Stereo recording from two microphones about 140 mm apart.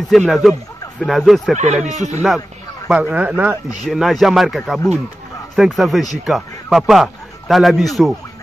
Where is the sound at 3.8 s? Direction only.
Centre (ahead or behind).